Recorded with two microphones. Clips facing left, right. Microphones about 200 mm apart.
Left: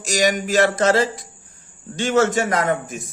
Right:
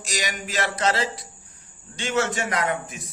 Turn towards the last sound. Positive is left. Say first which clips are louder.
# left 5 dB
turn(degrees=45)  # may be behind; listen again after turning